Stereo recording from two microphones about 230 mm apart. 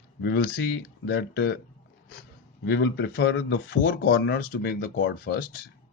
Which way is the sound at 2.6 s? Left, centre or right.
Left.